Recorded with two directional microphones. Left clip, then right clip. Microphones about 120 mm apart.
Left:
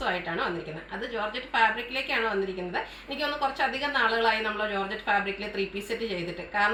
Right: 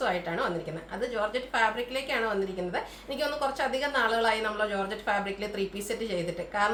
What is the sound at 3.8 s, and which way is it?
A woman's voice, 40° right (ahead or behind).